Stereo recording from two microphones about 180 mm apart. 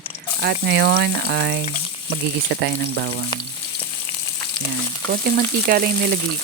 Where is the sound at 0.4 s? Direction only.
65° right (ahead or behind).